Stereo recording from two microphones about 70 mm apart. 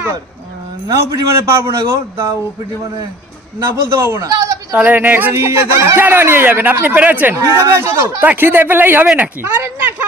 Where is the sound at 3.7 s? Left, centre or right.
Right.